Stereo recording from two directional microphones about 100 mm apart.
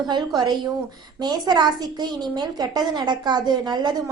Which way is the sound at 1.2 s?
45° right (ahead or behind).